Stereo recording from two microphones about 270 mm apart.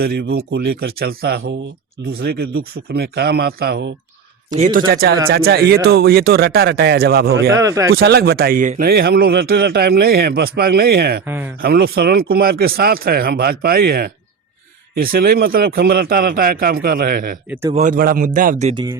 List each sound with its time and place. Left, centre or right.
0.0 s speech: right
4.5 s speech: right
7.5 s speech: centre
7.9 s speech: right
11.3 s speech: centre
11.6 s speech: right
17.5 s speech: centre
17.7 s speech: right